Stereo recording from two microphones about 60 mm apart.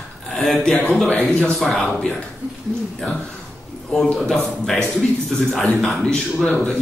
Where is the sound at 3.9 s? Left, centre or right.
Centre.